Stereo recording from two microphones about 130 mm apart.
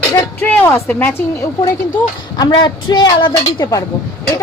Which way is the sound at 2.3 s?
30° left (ahead or behind).